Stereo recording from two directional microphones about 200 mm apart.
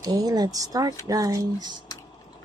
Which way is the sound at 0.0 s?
20° right (ahead or behind).